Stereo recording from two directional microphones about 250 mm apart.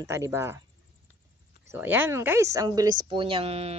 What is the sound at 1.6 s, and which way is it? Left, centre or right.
Speech, centre.